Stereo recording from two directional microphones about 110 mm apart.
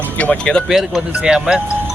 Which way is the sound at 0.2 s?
10° left (ahead or behind).